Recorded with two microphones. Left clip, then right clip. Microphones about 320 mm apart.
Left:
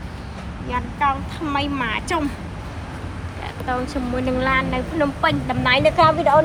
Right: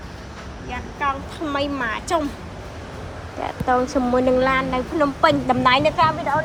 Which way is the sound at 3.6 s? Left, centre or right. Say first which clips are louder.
Right 5 dB; right.